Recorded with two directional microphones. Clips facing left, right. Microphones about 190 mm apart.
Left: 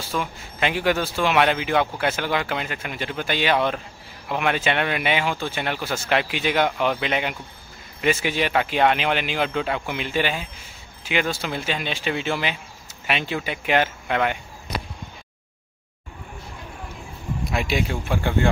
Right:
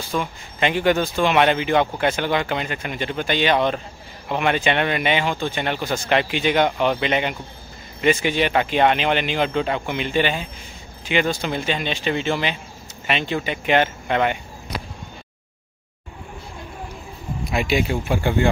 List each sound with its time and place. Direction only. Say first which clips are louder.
0.1 s speech: right 2 dB; 5° left (ahead or behind)
17.5 s speech: right 4 dB; centre (ahead or behind)